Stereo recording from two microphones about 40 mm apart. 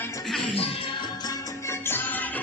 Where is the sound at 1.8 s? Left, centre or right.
Left.